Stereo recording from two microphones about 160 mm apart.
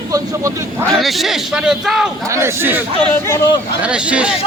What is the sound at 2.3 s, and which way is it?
Speech, 15° right (ahead or behind).